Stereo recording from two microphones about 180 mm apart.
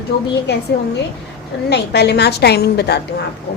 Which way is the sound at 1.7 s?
70° left (ahead or behind).